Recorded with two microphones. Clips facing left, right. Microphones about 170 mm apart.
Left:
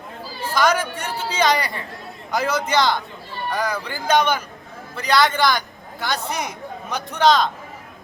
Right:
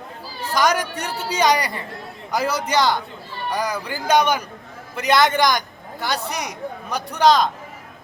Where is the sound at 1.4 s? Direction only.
15° right (ahead or behind).